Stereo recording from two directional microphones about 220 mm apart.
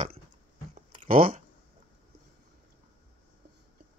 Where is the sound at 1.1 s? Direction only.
40° right (ahead or behind).